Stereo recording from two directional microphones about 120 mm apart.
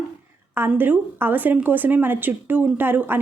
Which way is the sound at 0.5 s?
15° right (ahead or behind).